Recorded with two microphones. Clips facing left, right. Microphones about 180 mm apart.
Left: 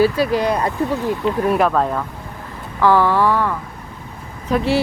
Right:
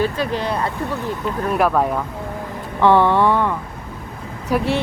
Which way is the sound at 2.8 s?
25° right (ahead or behind).